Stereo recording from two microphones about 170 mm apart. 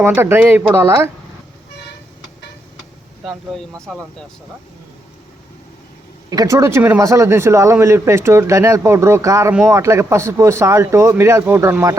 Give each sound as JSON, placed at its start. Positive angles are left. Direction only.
{"t": 0.0, "sound": "speech", "side_deg": -15}
{"t": 3.2, "sound": "speech", "side_deg": 0}
{"t": 6.3, "sound": "speech", "side_deg": -20}